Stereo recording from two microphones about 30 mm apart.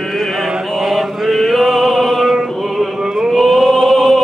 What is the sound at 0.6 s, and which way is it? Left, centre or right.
Chant, centre.